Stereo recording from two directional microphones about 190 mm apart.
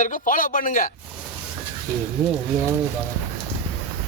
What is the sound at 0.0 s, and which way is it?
Speech, 45° left (ahead or behind).